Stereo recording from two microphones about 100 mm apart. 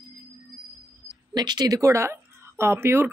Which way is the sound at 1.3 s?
45° right (ahead or behind).